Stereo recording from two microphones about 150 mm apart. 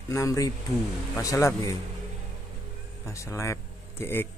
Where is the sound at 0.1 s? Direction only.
20° left (ahead or behind).